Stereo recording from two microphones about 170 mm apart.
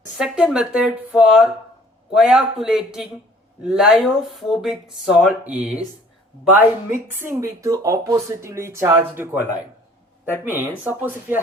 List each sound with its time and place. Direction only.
0.2 s speech: 5° right (ahead or behind)